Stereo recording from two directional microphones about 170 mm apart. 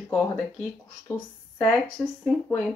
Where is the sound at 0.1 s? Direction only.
10° left (ahead or behind).